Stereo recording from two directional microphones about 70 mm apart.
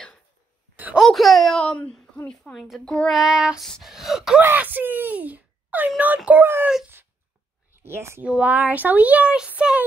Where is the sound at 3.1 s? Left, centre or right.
Centre.